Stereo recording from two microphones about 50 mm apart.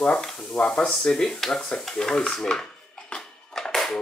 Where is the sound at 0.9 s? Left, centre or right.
Centre.